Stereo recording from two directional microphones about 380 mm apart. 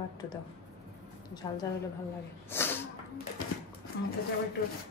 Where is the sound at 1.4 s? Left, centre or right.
Centre.